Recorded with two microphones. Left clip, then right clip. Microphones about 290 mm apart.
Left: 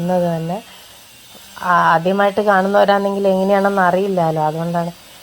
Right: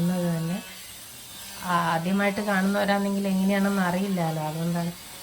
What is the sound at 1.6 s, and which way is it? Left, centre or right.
Speech, left.